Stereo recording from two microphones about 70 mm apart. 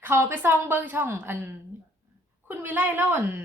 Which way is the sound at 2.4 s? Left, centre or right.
Right.